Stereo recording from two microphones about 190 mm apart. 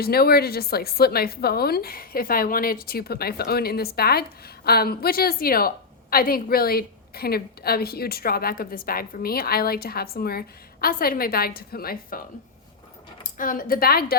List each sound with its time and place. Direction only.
0.0 s a woman's voice: 55° left (ahead or behind)
13.4 s a woman's voice: 45° left (ahead or behind)